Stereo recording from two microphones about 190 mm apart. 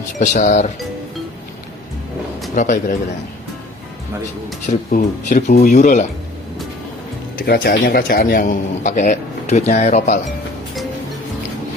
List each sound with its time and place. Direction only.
0.2 s a man's voice: 45° left (ahead or behind)
2.6 s speech: 40° left (ahead or behind)
4.6 s speech: 40° left (ahead or behind)
7.3 s a man's voice: 50° left (ahead or behind)